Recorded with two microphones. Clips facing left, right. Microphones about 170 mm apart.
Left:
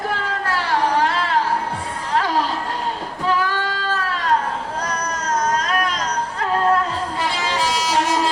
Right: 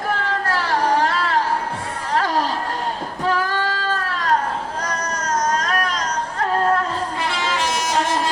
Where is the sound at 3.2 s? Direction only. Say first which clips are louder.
Even; 45° right (ahead or behind).